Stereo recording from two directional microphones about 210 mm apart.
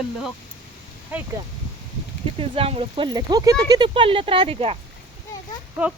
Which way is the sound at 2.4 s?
25° right (ahead or behind).